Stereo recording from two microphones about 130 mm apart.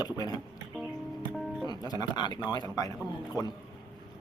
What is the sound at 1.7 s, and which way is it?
Speech, 30° left (ahead or behind).